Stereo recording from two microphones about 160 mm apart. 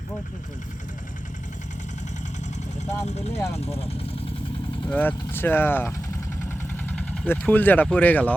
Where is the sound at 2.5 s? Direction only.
45° left (ahead or behind).